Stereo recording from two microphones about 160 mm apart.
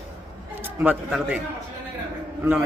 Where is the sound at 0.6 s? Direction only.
10° right (ahead or behind).